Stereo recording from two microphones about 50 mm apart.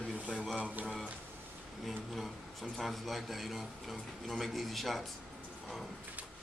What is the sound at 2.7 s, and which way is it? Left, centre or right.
A man's voice, centre.